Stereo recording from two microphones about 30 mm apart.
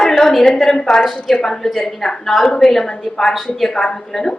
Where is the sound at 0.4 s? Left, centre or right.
Centre.